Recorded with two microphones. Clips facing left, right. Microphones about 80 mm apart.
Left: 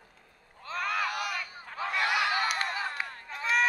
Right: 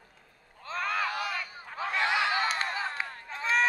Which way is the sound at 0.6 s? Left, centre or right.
Right.